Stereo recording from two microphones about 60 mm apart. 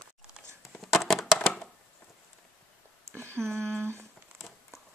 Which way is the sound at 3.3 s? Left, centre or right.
Right.